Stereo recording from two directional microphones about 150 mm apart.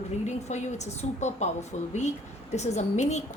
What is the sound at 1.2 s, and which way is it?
A woman's voice, 50° left (ahead or behind).